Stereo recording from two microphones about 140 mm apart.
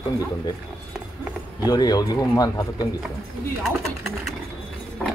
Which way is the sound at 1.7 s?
30° left (ahead or behind).